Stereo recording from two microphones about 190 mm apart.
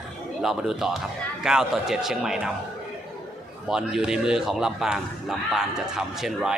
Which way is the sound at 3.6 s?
5° right (ahead or behind).